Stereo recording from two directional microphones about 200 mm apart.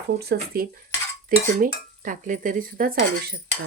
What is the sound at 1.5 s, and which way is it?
Speech, 40° right (ahead or behind).